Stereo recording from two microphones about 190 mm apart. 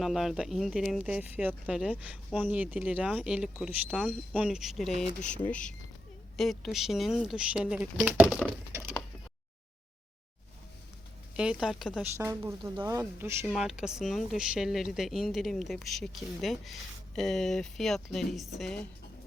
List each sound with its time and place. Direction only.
0.0 s speech: centre (ahead or behind)
11.3 s speech: 5° right (ahead or behind)
12.1 s speech: 15° right (ahead or behind); by 18.9 s centre (ahead or behind)